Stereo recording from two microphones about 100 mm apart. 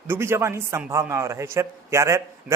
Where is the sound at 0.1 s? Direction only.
25° right (ahead or behind).